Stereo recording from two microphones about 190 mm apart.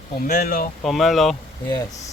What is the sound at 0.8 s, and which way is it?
Speech, centre (ahead or behind).